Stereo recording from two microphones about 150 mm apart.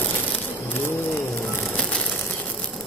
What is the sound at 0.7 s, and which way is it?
Bird, 15° left (ahead or behind).